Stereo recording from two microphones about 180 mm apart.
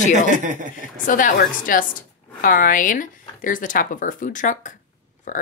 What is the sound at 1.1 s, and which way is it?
Speech, 50° left (ahead or behind).